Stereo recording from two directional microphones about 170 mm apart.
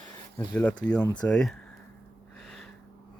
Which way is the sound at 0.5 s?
5° left (ahead or behind).